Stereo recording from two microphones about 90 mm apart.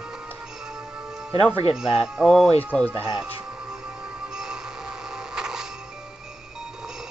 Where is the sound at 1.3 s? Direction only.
90° left.